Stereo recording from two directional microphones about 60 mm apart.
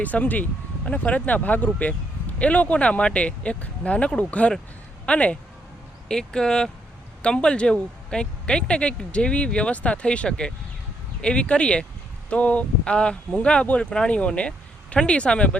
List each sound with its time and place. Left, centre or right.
0.0 s speech: left